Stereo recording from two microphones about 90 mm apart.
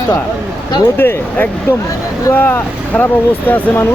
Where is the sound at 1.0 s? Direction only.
20° left (ahead or behind).